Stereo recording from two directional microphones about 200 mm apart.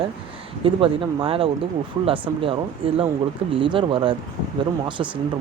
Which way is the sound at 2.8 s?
25° right (ahead or behind).